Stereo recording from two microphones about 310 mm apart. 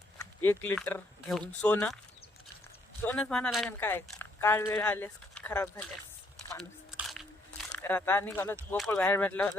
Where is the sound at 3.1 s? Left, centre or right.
Centre.